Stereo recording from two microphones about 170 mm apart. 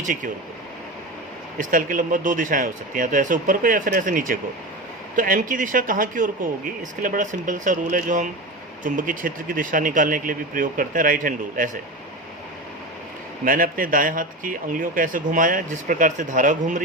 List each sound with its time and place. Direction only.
1.5 s a man's voice: 55° right (ahead or behind)
13.4 s a man's voice: 55° right (ahead or behind)